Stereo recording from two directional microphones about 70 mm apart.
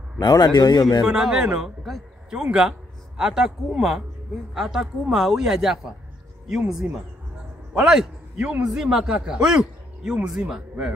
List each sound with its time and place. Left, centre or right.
0.2 s speech: left
1.0 s a man's voice: centre
1.9 s speech: centre
2.4 s a man's voice: centre